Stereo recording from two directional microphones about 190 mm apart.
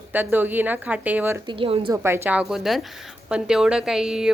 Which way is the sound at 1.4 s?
25° right (ahead or behind).